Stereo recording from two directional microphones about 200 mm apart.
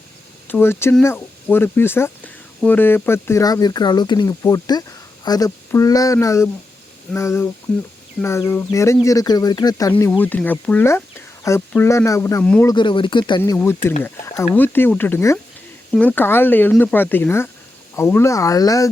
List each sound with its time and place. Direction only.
0.4 s speech: 10° left (ahead or behind)
9.9 s speech: 10° left (ahead or behind)
12.7 s speech: 25° left (ahead or behind)
13.4 s speech: 10° left (ahead or behind)